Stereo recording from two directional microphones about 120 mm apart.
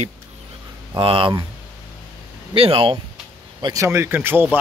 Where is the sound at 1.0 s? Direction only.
50° right (ahead or behind).